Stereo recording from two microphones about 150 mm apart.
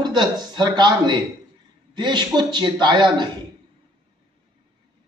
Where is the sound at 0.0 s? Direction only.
30° right (ahead or behind).